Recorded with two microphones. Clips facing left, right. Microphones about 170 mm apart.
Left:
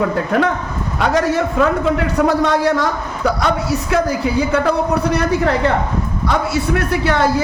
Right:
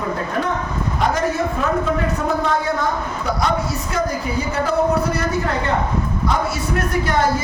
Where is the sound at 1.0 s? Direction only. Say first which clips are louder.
Left 4 dB; 75° left (ahead or behind).